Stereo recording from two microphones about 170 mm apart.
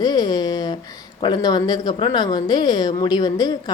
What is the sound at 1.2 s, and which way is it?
A woman's voice, 25° left (ahead or behind).